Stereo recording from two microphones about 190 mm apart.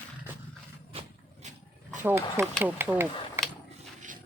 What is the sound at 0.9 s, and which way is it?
Vehicle, 30° right (ahead or behind).